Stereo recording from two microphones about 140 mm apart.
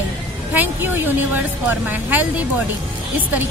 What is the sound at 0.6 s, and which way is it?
A woman's voice, 15° right (ahead or behind).